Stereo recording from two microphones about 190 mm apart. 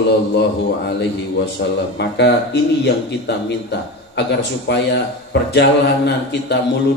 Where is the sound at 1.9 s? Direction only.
65° left (ahead or behind).